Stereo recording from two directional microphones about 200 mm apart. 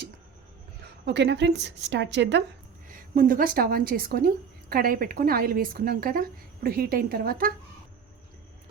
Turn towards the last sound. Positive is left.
turn(degrees=-45)  # may be behind; listen again after turning